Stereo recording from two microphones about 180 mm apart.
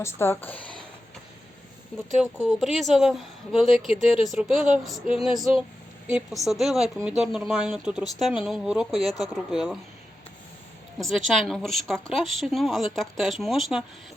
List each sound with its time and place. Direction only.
0.0 s speech: 10° left (ahead or behind)
2.4 s a woman's voice: centre (ahead or behind)
10.9 s a woman's voice: centre (ahead or behind)